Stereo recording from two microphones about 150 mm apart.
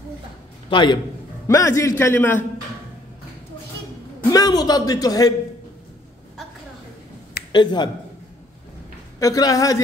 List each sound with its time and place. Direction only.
0.7 s a man's voice: 30° left (ahead or behind)
1.5 s speech: 20° left (ahead or behind)
4.3 s speech: 25° left (ahead or behind)
7.5 s speech: 30° left (ahead or behind)
9.2 s speech: 25° left (ahead or behind)